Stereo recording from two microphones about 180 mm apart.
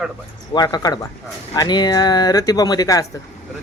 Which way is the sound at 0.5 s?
20° left (ahead or behind).